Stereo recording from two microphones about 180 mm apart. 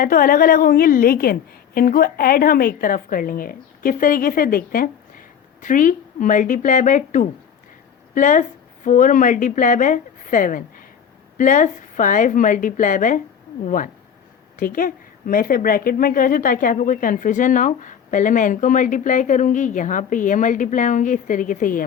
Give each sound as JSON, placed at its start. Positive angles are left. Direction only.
{"t": 0.0, "sound": "a woman's voice", "side_deg": 50}